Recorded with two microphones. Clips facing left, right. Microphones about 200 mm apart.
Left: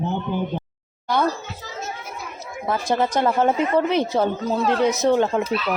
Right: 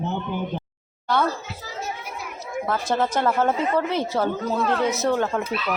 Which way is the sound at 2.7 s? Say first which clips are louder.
Left 2 dB; 15° left (ahead or behind).